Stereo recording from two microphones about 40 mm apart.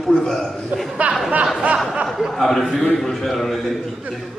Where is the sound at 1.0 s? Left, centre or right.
Right.